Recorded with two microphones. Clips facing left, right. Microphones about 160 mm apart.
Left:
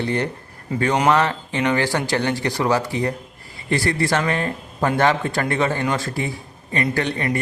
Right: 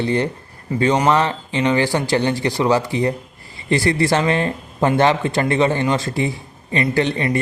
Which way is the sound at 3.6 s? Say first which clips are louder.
Right 4 dB; 25° right (ahead or behind).